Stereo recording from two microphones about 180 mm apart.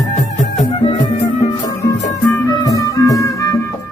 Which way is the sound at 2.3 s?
15° left (ahead or behind).